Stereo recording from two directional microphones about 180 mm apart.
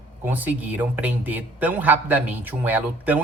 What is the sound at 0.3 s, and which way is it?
Speech, 10° right (ahead or behind).